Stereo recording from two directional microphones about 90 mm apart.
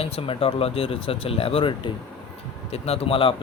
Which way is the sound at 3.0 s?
85° left.